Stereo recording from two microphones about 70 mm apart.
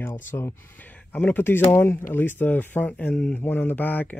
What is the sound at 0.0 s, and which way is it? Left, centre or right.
Speech, left.